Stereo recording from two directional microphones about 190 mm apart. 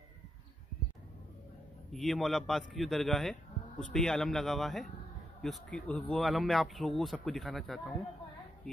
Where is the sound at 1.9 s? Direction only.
Centre (ahead or behind).